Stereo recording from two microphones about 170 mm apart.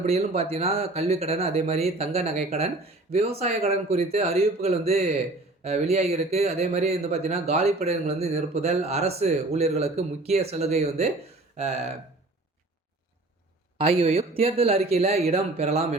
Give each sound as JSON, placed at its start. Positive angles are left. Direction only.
{"t": 0.0, "sound": "speech", "side_deg": -40}
{"t": 13.7, "sound": "speech", "side_deg": -35}